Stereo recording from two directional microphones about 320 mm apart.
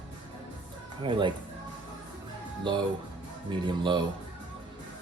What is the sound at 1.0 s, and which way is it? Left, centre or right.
Speech, centre.